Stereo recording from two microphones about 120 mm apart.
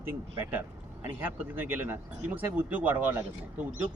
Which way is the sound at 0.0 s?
15° right (ahead or behind).